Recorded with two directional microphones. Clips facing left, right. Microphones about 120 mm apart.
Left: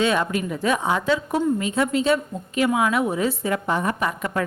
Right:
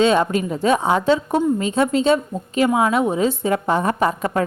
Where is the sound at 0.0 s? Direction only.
25° right (ahead or behind).